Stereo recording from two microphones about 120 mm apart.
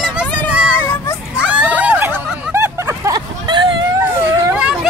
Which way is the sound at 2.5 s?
25° right (ahead or behind).